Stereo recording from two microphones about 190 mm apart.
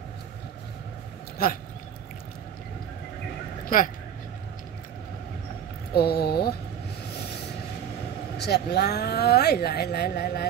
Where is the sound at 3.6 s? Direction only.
45° left (ahead or behind).